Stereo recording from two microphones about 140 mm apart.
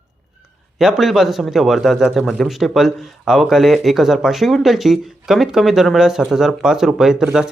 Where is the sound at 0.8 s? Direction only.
Centre (ahead or behind).